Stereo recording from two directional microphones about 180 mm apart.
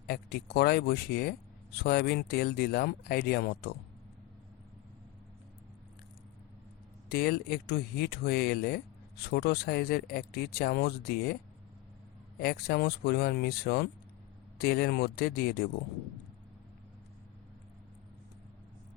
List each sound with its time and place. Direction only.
0.1 s speech: 60° left (ahead or behind)
7.1 s speech: 60° left (ahead or behind)
12.4 s speech: 60° left (ahead or behind)